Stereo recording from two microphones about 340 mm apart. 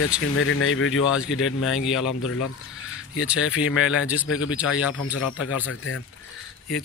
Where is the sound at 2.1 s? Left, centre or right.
Left.